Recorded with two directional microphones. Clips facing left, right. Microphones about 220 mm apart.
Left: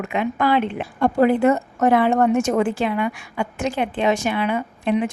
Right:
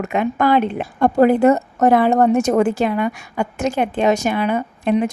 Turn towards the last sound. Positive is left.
turn(degrees=-40)  # may be behind; listen again after turning